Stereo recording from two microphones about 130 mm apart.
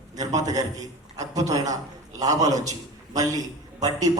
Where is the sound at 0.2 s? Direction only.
30° right (ahead or behind).